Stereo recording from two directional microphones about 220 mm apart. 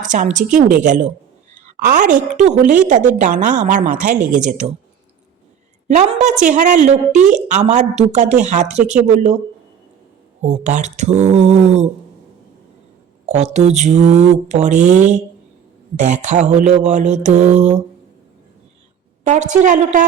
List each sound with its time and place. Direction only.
0.0 s a woman's voice: 35° right (ahead or behind)
5.9 s a woman's voice: 30° right (ahead or behind)
10.4 s a woman's voice: 30° right (ahead or behind)
13.2 s a woman's voice: 30° right (ahead or behind)
19.2 s a woman's voice: 35° right (ahead or behind)